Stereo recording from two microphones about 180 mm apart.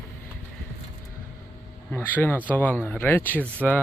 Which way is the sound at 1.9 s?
10° left (ahead or behind).